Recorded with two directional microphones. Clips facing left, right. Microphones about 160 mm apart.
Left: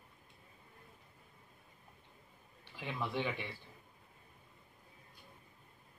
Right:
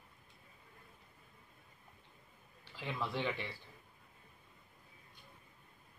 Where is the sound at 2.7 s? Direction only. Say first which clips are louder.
Left 1 dB; 15° left (ahead or behind).